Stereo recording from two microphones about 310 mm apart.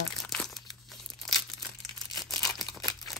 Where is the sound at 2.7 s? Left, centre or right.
Centre.